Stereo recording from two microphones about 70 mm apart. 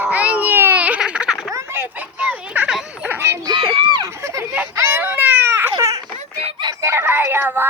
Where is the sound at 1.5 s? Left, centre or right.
Right.